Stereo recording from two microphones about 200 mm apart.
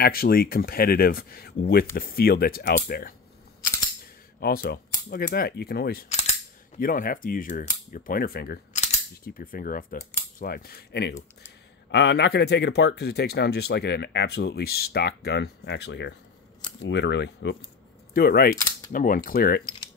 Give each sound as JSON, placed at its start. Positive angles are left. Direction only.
{"t": 0.0, "sound": "speech", "side_deg": 50}
{"t": 4.4, "sound": "speech", "side_deg": 50}
{"t": 6.0, "sound": "cap gun", "side_deg": 35}
{"t": 6.8, "sound": "speech", "side_deg": 45}
{"t": 8.7, "sound": "speech", "side_deg": 35}
{"t": 18.1, "sound": "speech", "side_deg": 50}